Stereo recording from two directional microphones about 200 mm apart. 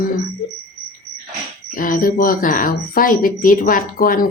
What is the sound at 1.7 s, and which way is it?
A woman's voice, 45° left (ahead or behind).